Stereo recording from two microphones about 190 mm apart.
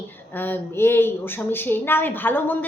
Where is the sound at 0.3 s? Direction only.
10° left (ahead or behind).